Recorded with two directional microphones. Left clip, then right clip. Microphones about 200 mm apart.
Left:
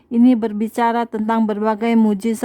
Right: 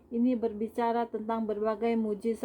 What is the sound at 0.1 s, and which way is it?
Speech, 45° left (ahead or behind).